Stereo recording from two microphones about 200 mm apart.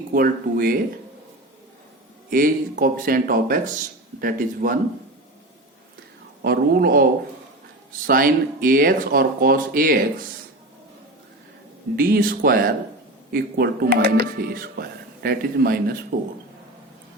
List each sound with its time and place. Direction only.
0.1 s speech: 45° right (ahead or behind)
2.3 s speech: 45° right (ahead or behind)
6.4 s speech: 50° right (ahead or behind)
11.9 s speech: 50° right (ahead or behind)